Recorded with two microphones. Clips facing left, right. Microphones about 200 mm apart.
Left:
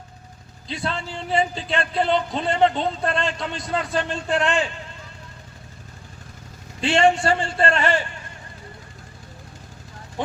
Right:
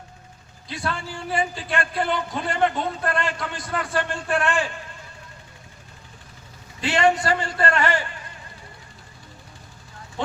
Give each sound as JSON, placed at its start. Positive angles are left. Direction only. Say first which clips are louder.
{"t": 0.7, "sound": "speech", "louder": "left 1 dB", "side_deg": 25}
{"t": 6.8, "sound": "speech", "louder": "left 2 dB", "side_deg": 25}
{"t": 10.2, "sound": "speech", "louder": "even", "side_deg": 15}